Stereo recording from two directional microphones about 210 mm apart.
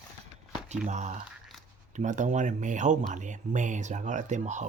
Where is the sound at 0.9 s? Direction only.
35° right (ahead or behind).